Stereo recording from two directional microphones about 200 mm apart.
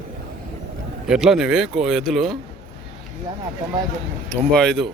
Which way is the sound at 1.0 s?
5° right (ahead or behind).